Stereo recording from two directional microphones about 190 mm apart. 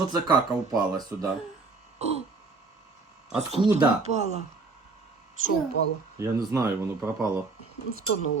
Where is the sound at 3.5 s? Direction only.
35° right (ahead or behind).